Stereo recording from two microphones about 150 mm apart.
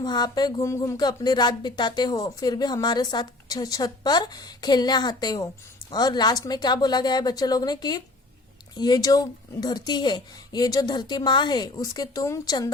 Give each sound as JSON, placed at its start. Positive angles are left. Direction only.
{"t": 0.0, "sound": "speech", "side_deg": 30}